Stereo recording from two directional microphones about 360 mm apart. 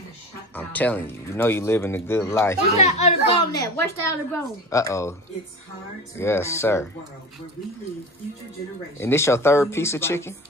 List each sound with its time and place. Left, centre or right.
0.6 s speech: centre
2.8 s speech: centre
6.1 s speech: centre
9.0 s speech: centre